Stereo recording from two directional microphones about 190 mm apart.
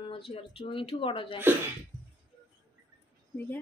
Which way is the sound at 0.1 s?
30° left (ahead or behind).